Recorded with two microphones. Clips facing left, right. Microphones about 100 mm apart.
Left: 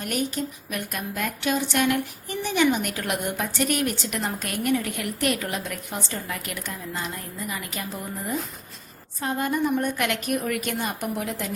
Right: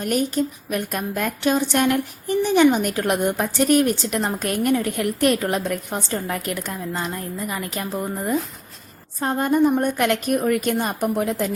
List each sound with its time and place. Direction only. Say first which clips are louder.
0.0 s a woman's voice: right 6 dB; 40° right (ahead or behind)